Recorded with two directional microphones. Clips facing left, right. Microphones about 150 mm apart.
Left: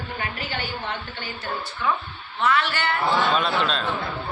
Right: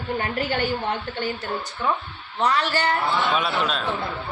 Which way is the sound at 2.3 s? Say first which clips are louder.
Right 1 dB; 40° right (ahead or behind).